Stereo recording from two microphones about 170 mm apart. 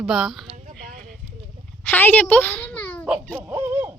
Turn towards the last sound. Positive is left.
turn(degrees=-10)  # may be behind; listen again after turning